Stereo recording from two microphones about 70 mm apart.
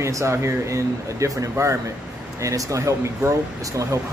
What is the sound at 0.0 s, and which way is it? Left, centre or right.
Speech, right.